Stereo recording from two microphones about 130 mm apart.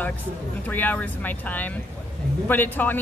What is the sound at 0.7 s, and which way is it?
A man's voice, 15° left (ahead or behind).